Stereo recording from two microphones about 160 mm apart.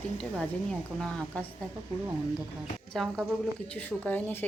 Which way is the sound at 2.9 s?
Centre (ahead or behind).